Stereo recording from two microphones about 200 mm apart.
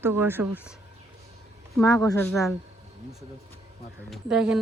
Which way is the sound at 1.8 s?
20° left (ahead or behind).